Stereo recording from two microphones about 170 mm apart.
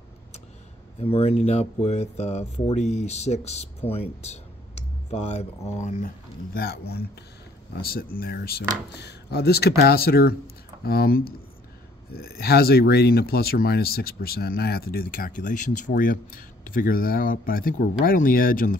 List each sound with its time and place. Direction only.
1.0 s speech: 35° left (ahead or behind)
3.9 s a sound: 40° left (ahead or behind)
5.8 s speech: 45° left (ahead or behind); by 8.6 s 65° left (ahead or behind)
8.9 s speech: 75° left (ahead or behind); by 18.8 s 55° left (ahead or behind)